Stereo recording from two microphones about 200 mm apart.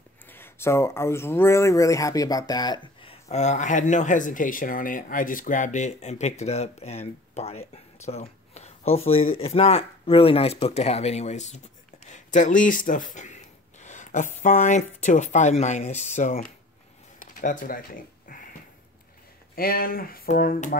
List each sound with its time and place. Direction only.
0.3 s speech: 10° left (ahead or behind); by 17.8 s 45° left (ahead or behind)
18.3 s a sound: 45° left (ahead or behind)
19.5 s speech: 45° left (ahead or behind)